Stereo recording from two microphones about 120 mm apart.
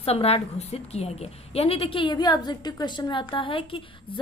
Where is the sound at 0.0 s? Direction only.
55° left (ahead or behind).